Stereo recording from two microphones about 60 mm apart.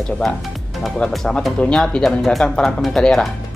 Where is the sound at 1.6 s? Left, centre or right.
Centre.